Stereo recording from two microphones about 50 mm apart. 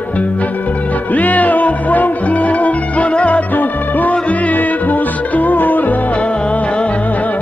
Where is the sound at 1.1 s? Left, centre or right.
Left.